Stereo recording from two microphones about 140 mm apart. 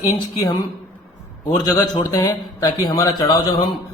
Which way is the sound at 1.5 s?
25° left (ahead or behind).